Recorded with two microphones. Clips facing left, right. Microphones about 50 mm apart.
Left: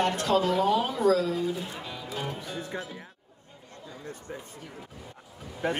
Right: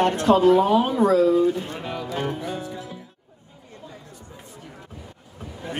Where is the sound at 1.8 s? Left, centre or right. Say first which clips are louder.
Right 8 dB; right.